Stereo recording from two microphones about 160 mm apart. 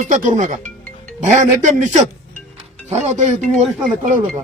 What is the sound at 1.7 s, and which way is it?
Speech, 50° right (ahead or behind).